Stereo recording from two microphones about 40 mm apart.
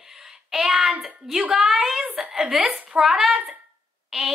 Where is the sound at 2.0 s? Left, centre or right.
Right.